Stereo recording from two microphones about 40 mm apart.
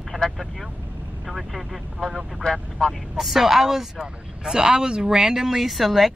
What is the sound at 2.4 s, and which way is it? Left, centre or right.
Speech, centre.